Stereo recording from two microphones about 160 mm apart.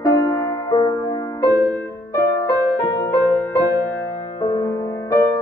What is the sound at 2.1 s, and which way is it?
Music, 20° left (ahead or behind).